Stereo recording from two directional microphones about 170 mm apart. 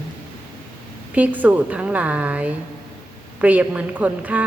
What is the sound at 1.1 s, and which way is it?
A man's voice, 10° right (ahead or behind).